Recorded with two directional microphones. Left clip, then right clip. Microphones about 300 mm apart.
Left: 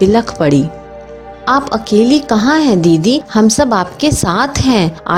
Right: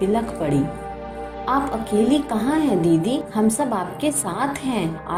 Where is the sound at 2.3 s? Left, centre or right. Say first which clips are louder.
Left 10 dB; left.